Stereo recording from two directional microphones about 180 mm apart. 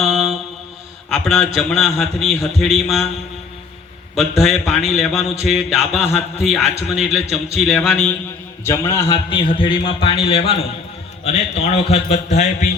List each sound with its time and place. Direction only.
0.0 s mantra: centre (ahead or behind)
1.1 s a man's voice: centre (ahead or behind)
4.1 s a man's voice: centre (ahead or behind)
8.6 s a man's voice: 15° left (ahead or behind); by 12.7 s 40° left (ahead or behind)